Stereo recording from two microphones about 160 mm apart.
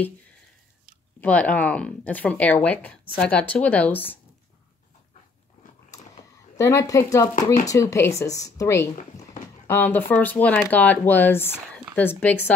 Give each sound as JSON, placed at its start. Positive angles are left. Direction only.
{"t": 1.2, "sound": "speech", "side_deg": 10}
{"t": 6.5, "sound": "a woman's voice", "side_deg": 20}